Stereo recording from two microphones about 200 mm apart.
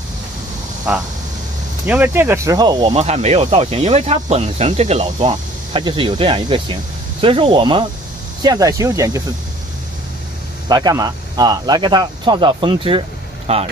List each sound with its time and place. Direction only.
0.9 s speech: 5° right (ahead or behind)
2.9 s speech: 30° right (ahead or behind); by 9.2 s 15° right (ahead or behind)
10.7 s speech: 20° right (ahead or behind)